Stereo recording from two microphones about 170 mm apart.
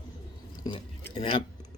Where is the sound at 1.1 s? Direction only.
30° left (ahead or behind).